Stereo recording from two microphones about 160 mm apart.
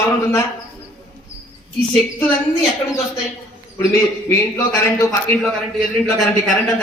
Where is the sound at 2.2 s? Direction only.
10° left (ahead or behind).